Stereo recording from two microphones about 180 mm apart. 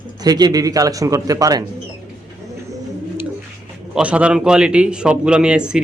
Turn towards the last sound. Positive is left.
turn(degrees=-5)  # may be behind; listen again after turning